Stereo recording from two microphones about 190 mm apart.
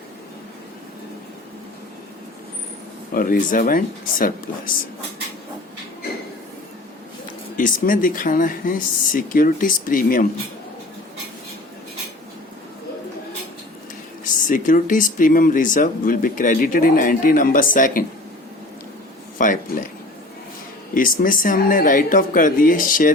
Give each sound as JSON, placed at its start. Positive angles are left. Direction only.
{"t": 3.1, "sound": "speech", "side_deg": 45}
{"t": 7.5, "sound": "speech", "side_deg": 45}
{"t": 14.3, "sound": "speech", "side_deg": 45}
{"t": 19.4, "sound": "speech", "side_deg": 45}
{"t": 20.9, "sound": "speech", "side_deg": 45}